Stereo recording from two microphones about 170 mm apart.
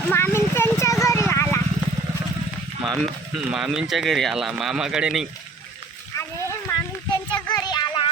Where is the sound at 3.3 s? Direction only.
5° right (ahead or behind).